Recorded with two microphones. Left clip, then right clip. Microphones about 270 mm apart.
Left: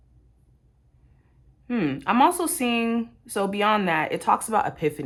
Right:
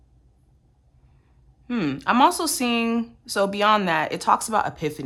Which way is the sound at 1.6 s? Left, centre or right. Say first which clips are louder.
Right 1 dB; centre.